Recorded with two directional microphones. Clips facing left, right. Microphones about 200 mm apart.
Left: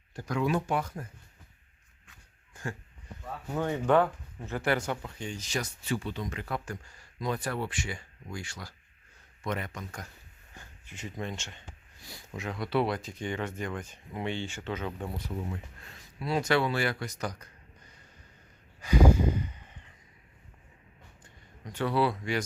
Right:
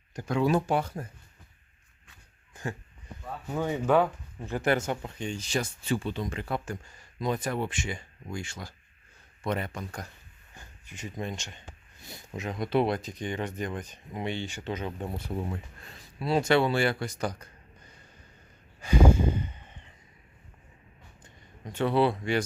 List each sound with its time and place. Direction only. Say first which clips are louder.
0.2 s speech: right 4 dB; 30° right (ahead or behind)
2.5 s a sound: right 2 dB; 20° right (ahead or behind)
3.5 s speech: right 1 dB; 5° right (ahead or behind); by 10.1 s 35° right (ahead or behind)
10.8 s speech: right 2 dB; 15° right (ahead or behind)
15.3 s speech: right 3 dB; 45° right (ahead or behind)
15.9 s speech: right 4 dB; 30° right (ahead or behind)
18.8 s a sound: right 1 dB; 25° right (ahead or behind)
21.6 s speech: right 3 dB; 25° right (ahead or behind)